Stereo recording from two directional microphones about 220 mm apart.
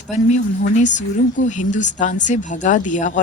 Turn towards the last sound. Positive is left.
turn(degrees=35)  # may be behind; listen again after turning